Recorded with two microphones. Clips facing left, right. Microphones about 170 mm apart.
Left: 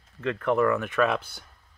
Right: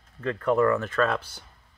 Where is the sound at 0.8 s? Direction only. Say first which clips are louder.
Left 1 dB; 15° left (ahead or behind).